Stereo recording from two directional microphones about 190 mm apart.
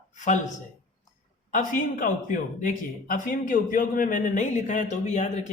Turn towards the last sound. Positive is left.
turn(degrees=40)  # may be behind; listen again after turning